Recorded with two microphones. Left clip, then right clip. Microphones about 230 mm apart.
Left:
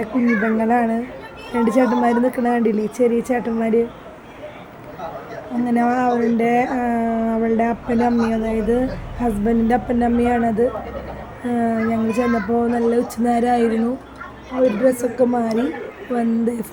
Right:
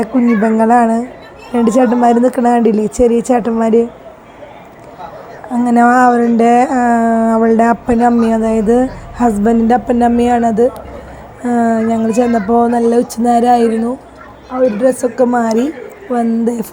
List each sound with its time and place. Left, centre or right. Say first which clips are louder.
0.0 s a woman's voice: right 6 dB; centre
5.6 s a woman's voice: right 10 dB; right
14.8 s a woman's voice: right 5 dB; centre